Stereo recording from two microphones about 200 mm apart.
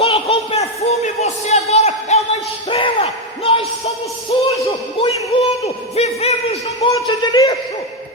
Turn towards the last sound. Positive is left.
turn(degrees=20)  # may be behind; listen again after turning